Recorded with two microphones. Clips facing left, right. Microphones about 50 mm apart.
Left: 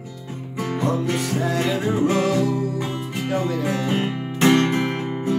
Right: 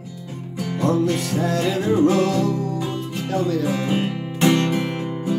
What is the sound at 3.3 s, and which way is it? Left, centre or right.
Speech, centre.